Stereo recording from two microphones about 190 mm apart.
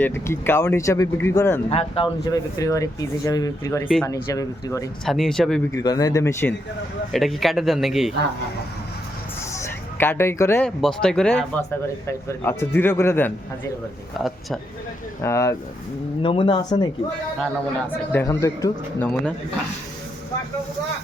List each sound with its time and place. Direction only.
0.0 s speech: 15° left (ahead or behind)
5.0 s speech: centre (ahead or behind)
5.7 s speech: 20° left (ahead or behind)
7.1 s speech: centre (ahead or behind)
9.5 s a sound: 15° left (ahead or behind)
10.8 s speech: 5° left (ahead or behind)
15.2 s speech: 15° left (ahead or behind)
16.2 s speech: 25° left (ahead or behind)
18.1 s speech: 15° left (ahead or behind)